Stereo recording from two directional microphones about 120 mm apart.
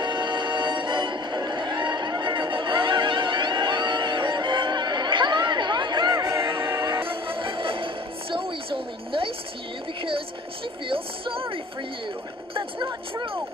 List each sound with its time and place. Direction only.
0.0 s music: 40° right (ahead or behind); by 6.9 s 20° right (ahead or behind)
7.2 s music: 45° right (ahead or behind)
10.9 s a sound: 50° right (ahead or behind)